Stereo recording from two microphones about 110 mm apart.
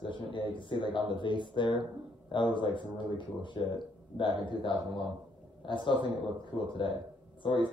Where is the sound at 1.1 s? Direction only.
45° left (ahead or behind).